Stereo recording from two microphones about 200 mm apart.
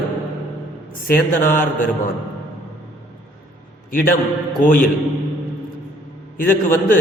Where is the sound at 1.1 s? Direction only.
45° left (ahead or behind).